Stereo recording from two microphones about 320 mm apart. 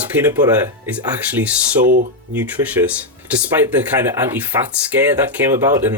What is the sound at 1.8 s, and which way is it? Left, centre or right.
Speech, right.